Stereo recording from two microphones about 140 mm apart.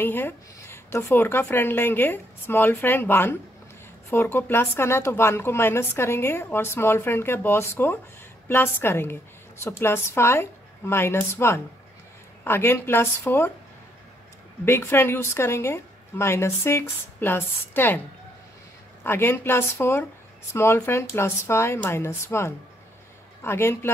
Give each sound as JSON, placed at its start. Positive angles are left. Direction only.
{"t": 0.0, "sound": "a woman's voice", "side_deg": 15}
{"t": 14.6, "sound": "a woman's voice", "side_deg": 20}
{"t": 19.0, "sound": "a woman's voice", "side_deg": 15}